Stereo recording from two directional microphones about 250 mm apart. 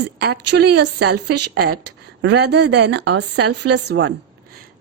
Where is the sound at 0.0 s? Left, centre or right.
Right.